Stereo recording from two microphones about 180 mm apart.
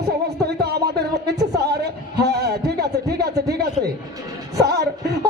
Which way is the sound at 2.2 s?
65° right (ahead or behind).